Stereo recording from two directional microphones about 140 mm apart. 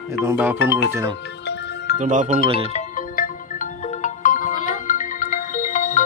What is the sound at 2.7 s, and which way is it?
Music, 70° left (ahead or behind).